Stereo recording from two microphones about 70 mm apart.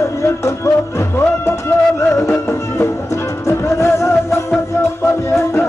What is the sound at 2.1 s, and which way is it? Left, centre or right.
Music, left.